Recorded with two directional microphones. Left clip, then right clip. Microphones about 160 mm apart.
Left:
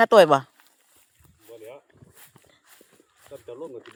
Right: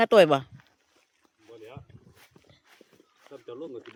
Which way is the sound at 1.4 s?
90° left.